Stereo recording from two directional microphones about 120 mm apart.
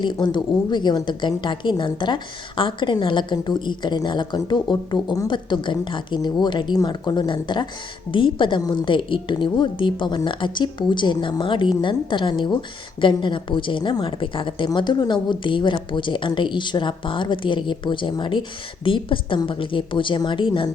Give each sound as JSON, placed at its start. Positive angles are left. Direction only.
{"t": 0.0, "sound": "a woman's voice", "side_deg": 40}